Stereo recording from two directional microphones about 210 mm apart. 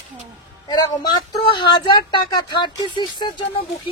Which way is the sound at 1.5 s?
25° left (ahead or behind).